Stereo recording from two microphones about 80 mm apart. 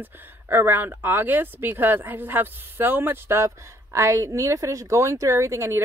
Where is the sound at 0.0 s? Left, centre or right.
Right.